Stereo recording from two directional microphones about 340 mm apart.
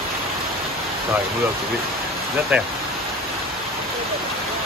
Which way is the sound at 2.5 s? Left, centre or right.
Centre.